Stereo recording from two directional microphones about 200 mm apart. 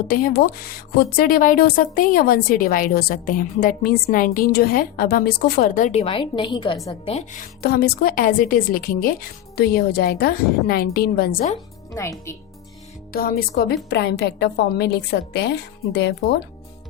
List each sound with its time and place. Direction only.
0.1 s a woman's voice: 45° left (ahead or behind); by 6.9 s 20° left (ahead or behind)
7.0 s a woman's voice: 30° left (ahead or behind)
7.6 s a woman's voice: 50° left (ahead or behind)
13.1 s a woman's voice: 50° left (ahead or behind)